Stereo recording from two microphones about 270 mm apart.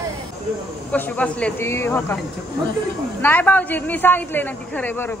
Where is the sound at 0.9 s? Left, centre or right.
Centre.